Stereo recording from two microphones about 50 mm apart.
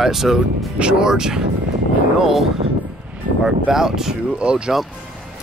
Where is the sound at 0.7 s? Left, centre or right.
Centre.